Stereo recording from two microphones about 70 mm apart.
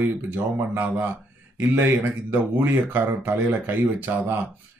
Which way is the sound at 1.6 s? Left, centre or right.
Right.